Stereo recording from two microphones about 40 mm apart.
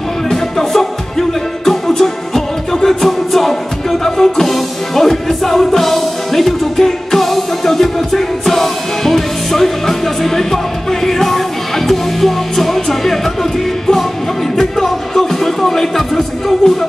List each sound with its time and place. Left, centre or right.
0.3 s music: centre